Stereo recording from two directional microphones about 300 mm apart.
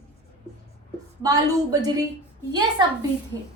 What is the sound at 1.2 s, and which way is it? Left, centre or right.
A woman's voice, centre.